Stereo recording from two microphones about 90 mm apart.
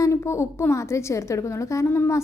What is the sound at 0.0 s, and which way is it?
A woman's voice, 30° left (ahead or behind).